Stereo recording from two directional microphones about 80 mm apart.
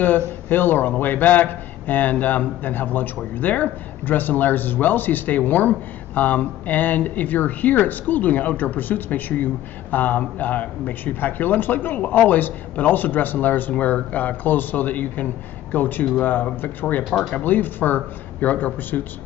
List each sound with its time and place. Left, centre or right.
0.5 s speech: left